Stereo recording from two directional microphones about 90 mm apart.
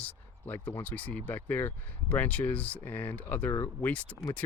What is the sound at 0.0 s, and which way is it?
Speech, 20° left (ahead or behind).